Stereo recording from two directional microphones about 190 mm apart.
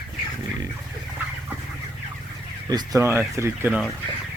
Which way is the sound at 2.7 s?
20° right (ahead or behind).